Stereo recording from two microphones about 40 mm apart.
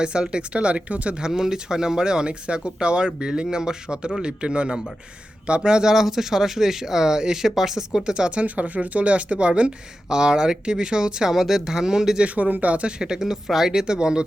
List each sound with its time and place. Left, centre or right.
0.0 s speech: right
1.2 s speech: centre
5.9 s speech: centre
8.4 s speech: right; by 12.2 s centre
12.2 s speech: right
13.0 s speech: centre